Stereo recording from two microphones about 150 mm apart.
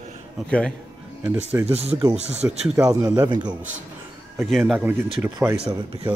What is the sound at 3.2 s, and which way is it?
Speech, 30° right (ahead or behind).